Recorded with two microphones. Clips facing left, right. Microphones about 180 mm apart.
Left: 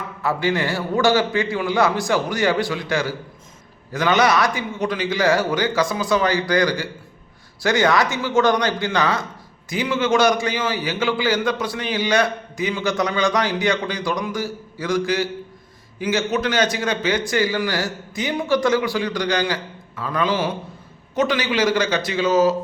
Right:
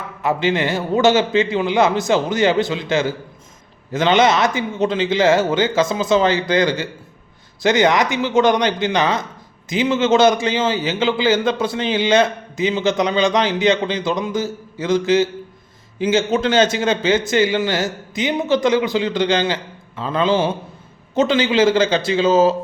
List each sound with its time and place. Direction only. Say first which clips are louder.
0.2 s a man's voice: right 3 dB; 20° right (ahead or behind)